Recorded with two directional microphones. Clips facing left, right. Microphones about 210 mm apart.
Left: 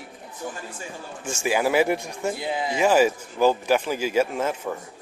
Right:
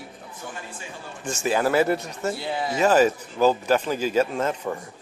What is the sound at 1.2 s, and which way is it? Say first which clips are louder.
Speech: even; 10° left (ahead or behind).